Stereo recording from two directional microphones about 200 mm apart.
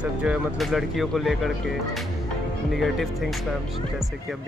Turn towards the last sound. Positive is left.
turn(degrees=0)  # may be behind; listen again after turning